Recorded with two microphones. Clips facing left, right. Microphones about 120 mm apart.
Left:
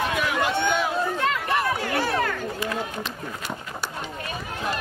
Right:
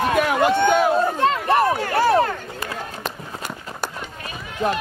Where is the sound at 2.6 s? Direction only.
45° right (ahead or behind).